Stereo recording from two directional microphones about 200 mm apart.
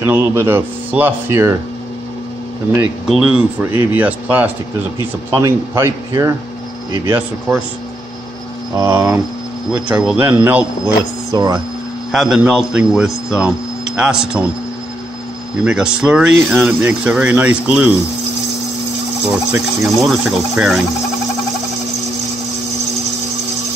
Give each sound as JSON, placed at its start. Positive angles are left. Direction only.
{"t": 0.0, "sound": "speech", "side_deg": -10}
{"t": 3.1, "sound": "speech", "side_deg": -5}
{"t": 8.7, "sound": "speech", "side_deg": -10}
{"t": 12.1, "sound": "speech", "side_deg": 0}
{"t": 15.6, "sound": "speech", "side_deg": -5}
{"t": 19.5, "sound": "speech", "side_deg": -5}